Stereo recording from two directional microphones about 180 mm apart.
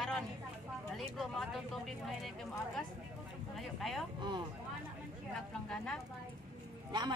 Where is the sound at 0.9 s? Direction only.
Centre (ahead or behind).